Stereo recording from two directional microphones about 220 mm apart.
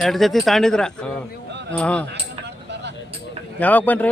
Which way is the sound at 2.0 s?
50° right (ahead or behind).